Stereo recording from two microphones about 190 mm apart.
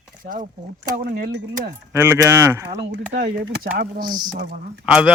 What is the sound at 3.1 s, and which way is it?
Speech, 50° right (ahead or behind).